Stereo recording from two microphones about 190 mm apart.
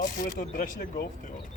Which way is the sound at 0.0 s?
45° left (ahead or behind).